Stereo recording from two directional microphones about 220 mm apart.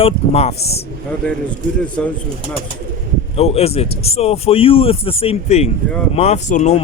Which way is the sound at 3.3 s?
25° left (ahead or behind).